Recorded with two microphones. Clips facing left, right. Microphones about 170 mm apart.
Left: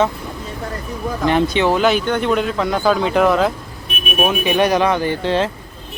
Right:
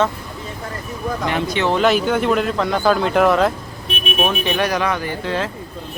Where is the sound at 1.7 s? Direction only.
Centre (ahead or behind).